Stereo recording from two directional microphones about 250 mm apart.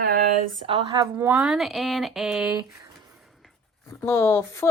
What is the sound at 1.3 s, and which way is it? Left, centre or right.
Speech, centre.